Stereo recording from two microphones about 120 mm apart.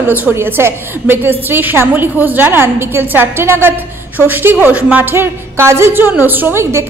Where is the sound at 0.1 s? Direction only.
15° right (ahead or behind).